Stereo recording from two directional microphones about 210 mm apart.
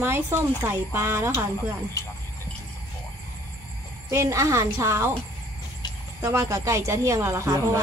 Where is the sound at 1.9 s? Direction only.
15° left (ahead or behind).